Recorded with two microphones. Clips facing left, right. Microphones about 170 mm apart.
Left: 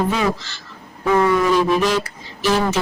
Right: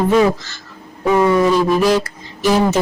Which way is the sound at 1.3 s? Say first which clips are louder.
Right 3 dB; 35° right (ahead or behind).